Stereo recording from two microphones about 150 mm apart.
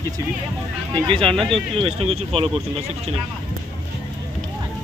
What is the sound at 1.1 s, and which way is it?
Speech, 35° right (ahead or behind).